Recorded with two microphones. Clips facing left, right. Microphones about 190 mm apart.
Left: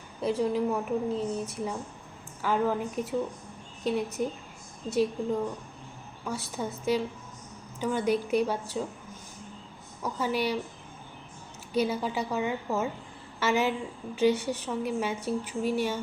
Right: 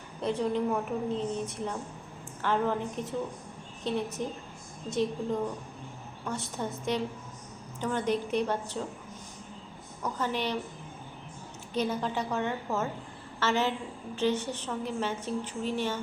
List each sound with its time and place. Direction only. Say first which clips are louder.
0.2 s a woman's voice: left 2 dB; 5° left (ahead or behind)
4.9 s a woman's voice: left 3 dB; 5° left (ahead or behind)
10.0 s a woman's voice: left 2 dB; 10° left (ahead or behind)
11.7 s a woman's voice: left 2 dB; 10° left (ahead or behind)